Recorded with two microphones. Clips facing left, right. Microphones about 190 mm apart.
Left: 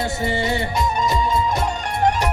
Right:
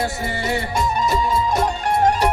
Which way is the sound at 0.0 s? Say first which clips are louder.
Left 2 dB; 20° left (ahead or behind).